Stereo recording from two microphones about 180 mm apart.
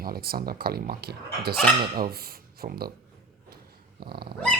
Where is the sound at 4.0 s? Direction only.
60° right (ahead or behind).